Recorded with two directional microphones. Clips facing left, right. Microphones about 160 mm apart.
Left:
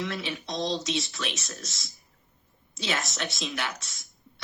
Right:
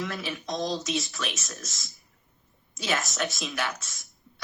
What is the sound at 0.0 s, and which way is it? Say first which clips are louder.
Speech: even; 25° left (ahead or behind).